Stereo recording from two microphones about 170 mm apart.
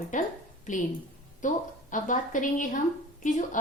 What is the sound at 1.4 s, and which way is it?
A woman's voice, 50° left (ahead or behind).